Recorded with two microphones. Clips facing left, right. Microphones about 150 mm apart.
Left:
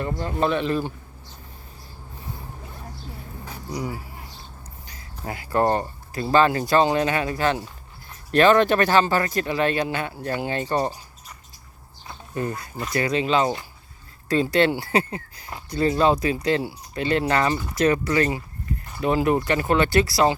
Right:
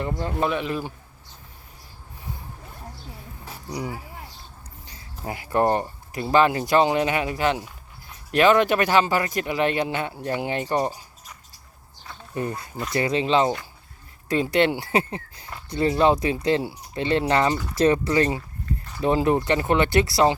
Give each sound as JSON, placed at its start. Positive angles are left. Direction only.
{"t": 0.3, "sound": "speech", "side_deg": -10}
{"t": 3.7, "sound": "speech", "side_deg": -20}
{"t": 12.3, "sound": "speech", "side_deg": -20}